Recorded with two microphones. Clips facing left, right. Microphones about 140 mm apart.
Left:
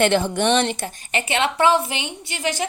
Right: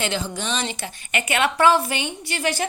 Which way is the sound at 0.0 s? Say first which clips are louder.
Left 8 dB; 60° left (ahead or behind).